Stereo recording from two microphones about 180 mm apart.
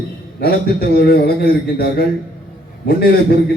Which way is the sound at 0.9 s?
60° left (ahead or behind).